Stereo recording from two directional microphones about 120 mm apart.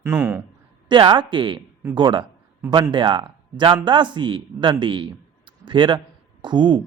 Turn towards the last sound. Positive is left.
turn(degrees=-40)  # may be behind; listen again after turning